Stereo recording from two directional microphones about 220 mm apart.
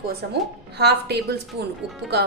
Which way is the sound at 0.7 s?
50° right (ahead or behind).